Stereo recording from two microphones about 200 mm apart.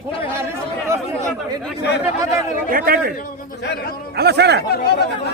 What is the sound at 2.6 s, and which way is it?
Speech, 45° right (ahead or behind).